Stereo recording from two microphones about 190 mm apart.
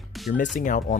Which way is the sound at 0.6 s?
45° left (ahead or behind).